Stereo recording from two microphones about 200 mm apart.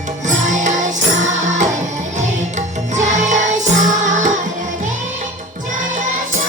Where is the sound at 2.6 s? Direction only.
35° right (ahead or behind).